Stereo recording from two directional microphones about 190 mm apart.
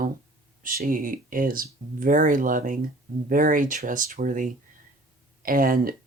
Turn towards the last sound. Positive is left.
turn(degrees=-50)  # may be behind; listen again after turning